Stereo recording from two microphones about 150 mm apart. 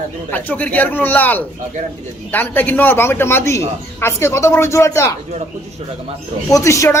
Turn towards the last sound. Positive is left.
turn(degrees=20)  # may be behind; listen again after turning